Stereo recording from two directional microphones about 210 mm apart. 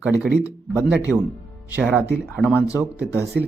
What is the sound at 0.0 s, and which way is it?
Speech, 5° right (ahead or behind).